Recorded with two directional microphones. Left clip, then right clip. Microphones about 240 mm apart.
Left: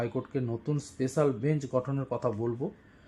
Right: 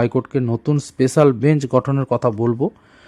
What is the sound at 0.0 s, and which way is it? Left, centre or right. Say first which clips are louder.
A man's voice: right 13 dB; right.